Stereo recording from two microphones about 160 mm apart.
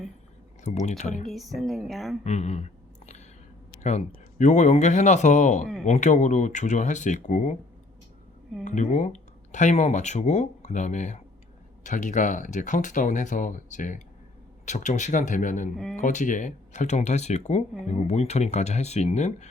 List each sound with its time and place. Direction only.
0.6 s speech: 45° left (ahead or behind)
1.3 s speech: centre (ahead or behind)
2.2 s speech: 45° left (ahead or behind)
3.8 s speech: 45° left (ahead or behind)
8.6 s speech: 50° left (ahead or behind)